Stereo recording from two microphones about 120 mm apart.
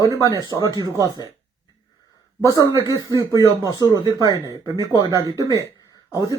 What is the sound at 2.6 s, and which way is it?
Speech, 30° right (ahead or behind).